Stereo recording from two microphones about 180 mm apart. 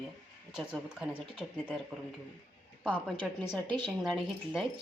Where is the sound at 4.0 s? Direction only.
Centre (ahead or behind).